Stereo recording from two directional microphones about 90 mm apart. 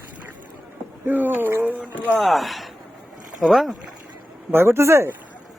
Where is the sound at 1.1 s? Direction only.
20° right (ahead or behind).